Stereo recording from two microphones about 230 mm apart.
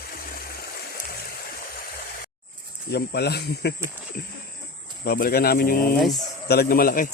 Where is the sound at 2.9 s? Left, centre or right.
Left.